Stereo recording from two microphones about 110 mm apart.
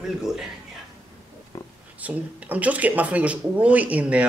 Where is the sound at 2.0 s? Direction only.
15° right (ahead or behind).